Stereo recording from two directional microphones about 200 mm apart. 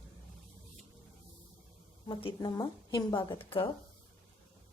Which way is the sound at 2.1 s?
20° left (ahead or behind).